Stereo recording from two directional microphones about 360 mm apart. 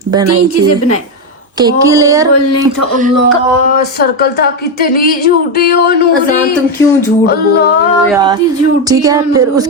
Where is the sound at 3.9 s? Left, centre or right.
Left.